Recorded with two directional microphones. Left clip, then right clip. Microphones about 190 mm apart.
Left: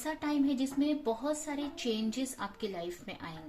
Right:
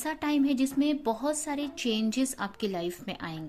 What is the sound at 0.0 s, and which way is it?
A woman's voice, 50° right (ahead or behind).